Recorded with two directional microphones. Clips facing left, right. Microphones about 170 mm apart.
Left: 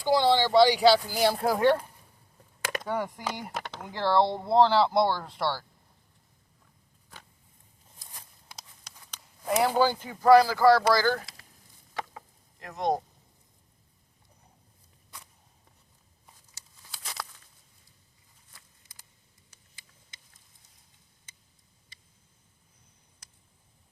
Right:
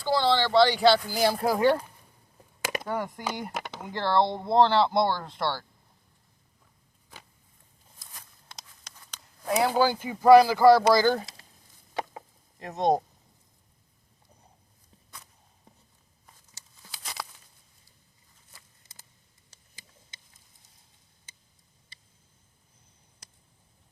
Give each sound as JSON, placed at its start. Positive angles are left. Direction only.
{"t": 0.0, "sound": "speech", "side_deg": 15}
{"t": 2.8, "sound": "speech", "side_deg": 0}
{"t": 8.4, "sound": "speech", "side_deg": 5}
{"t": 11.9, "sound": "chicken", "side_deg": -25}
{"t": 17.2, "sound": "a sound", "side_deg": 0}